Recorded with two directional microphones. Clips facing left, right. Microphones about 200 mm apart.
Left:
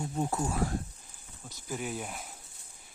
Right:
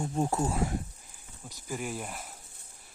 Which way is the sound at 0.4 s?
20° right (ahead or behind).